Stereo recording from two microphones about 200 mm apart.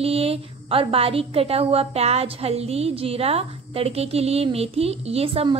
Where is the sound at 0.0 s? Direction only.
30° right (ahead or behind).